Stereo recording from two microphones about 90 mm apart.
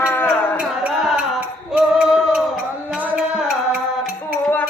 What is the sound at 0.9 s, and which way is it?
Music, 5° right (ahead or behind).